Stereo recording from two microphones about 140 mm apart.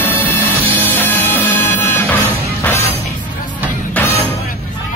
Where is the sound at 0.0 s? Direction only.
15° left (ahead or behind).